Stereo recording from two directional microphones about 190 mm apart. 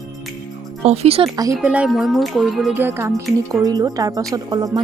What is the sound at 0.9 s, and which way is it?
Speech, 30° right (ahead or behind).